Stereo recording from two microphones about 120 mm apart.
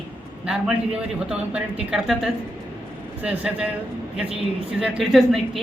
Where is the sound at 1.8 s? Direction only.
5° right (ahead or behind).